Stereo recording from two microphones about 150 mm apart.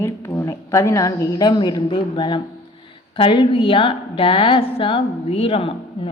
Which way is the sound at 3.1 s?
35° left (ahead or behind).